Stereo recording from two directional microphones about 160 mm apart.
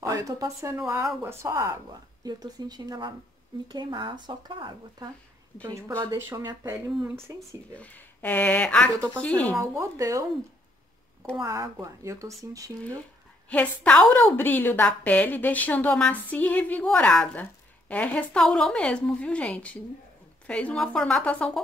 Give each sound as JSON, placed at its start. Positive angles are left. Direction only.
{"t": 0.0, "sound": "speech", "side_deg": -20}
{"t": 6.9, "sound": "speech", "side_deg": -5}
{"t": 7.2, "sound": "speech", "side_deg": -20}
{"t": 7.7, "sound": "a woman's voice", "side_deg": 10}
{"t": 9.5, "sound": "speech", "side_deg": -20}
{"t": 11.3, "sound": "speech", "side_deg": -20}
{"t": 13.5, "sound": "a woman's voice", "side_deg": 5}